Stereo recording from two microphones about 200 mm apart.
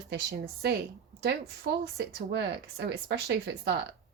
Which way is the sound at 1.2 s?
55° right (ahead or behind).